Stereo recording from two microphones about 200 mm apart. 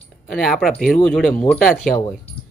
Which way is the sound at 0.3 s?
Centre (ahead or behind).